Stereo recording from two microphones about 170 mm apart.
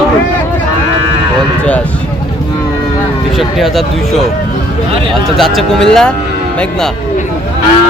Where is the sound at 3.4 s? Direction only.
Centre (ahead or behind).